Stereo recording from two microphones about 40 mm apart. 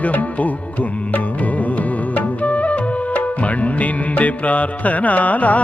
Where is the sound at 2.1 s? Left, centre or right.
Left.